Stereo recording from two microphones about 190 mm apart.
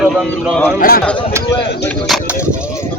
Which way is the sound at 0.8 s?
50° left (ahead or behind).